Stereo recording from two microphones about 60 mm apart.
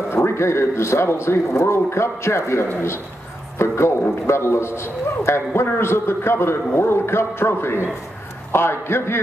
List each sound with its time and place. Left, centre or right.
0.1 s a man's voice: left